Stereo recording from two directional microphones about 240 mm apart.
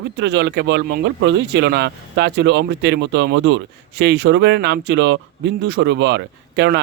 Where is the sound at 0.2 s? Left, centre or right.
Right.